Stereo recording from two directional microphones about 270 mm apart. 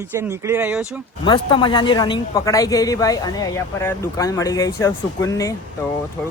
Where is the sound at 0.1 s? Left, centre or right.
Centre.